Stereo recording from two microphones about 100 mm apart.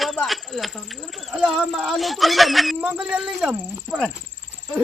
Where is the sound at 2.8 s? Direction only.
10° right (ahead or behind).